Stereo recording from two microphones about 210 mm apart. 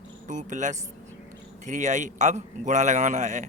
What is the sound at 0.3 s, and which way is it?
A man's voice, 35° right (ahead or behind).